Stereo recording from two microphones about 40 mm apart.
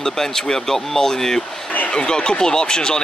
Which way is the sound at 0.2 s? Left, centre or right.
Centre.